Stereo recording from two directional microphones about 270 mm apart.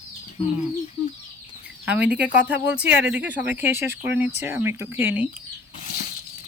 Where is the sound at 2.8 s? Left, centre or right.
Right.